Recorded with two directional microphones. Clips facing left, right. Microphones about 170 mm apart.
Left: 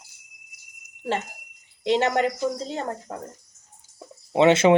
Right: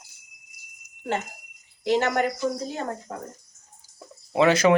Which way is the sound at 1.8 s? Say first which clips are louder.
Left 1 dB; 25° left (ahead or behind).